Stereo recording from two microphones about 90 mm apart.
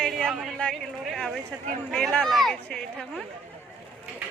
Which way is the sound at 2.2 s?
Centre (ahead or behind).